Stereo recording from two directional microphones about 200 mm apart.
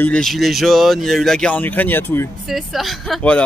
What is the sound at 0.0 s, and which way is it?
Speech, 5° left (ahead or behind).